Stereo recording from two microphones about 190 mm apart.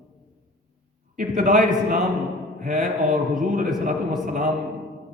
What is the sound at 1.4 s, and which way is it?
A man's voice, 45° right (ahead or behind).